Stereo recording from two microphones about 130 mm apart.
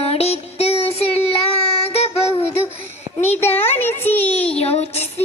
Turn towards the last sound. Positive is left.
turn(degrees=55)  # may be behind; listen again after turning